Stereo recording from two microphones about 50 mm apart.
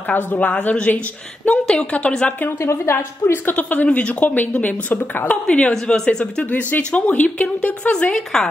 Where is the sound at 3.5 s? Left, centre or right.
Left.